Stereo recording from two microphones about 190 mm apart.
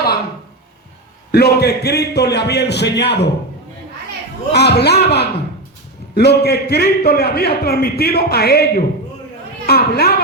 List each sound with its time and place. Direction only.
1.3 s a man's voice: 55° left (ahead or behind)
4.5 s a man's voice: 60° left (ahead or behind)